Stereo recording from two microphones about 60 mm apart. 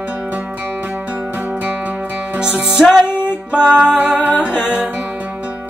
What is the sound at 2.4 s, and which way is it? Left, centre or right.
Music, centre.